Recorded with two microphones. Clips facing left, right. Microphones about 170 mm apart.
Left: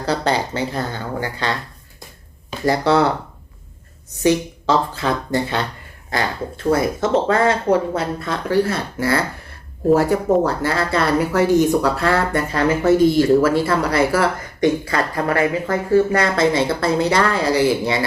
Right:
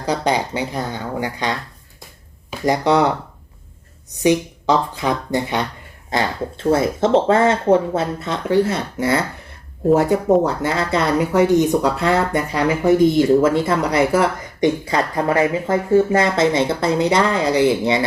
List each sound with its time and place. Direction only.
0.0 s speech: 15° right (ahead or behind)
4.2 s speech: 15° right (ahead or behind)